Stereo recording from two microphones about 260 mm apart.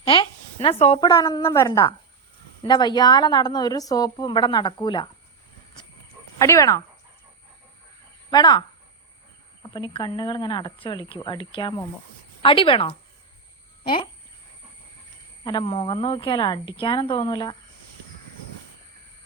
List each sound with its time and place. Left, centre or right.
0.0 s a sound: left
1.1 s a woman's voice: centre
6.4 s a woman's voice: centre
8.3 s a woman's voice: centre
9.6 s a woman's voice: centre
15.4 s a woman's voice: centre